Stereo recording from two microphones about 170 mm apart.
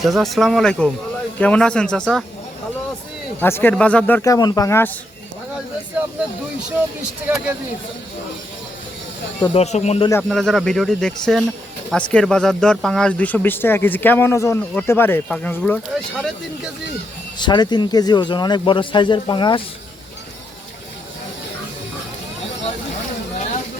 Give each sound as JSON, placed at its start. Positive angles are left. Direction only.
{"t": 0.0, "sound": "speech", "side_deg": 0}
{"t": 3.4, "sound": "speech", "side_deg": 10}
{"t": 6.7, "sound": "speech", "side_deg": -5}
{"t": 9.4, "sound": "speech", "side_deg": 35}
{"t": 10.2, "sound": "speech", "side_deg": 0}
{"t": 17.3, "sound": "speech", "side_deg": 25}